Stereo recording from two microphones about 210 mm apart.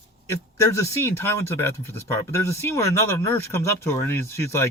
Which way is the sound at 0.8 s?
10° left (ahead or behind).